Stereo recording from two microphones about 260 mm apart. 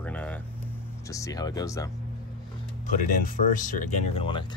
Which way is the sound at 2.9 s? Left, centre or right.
Left.